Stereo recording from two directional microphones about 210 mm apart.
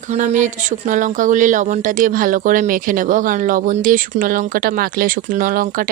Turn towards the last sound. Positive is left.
turn(degrees=-40)  # may be behind; listen again after turning